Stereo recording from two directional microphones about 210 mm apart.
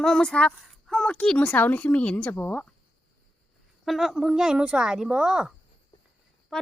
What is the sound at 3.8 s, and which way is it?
Speech, centre (ahead or behind).